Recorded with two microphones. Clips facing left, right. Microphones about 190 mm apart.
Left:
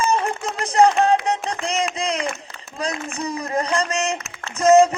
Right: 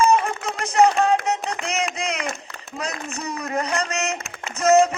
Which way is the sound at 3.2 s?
30° left (ahead or behind).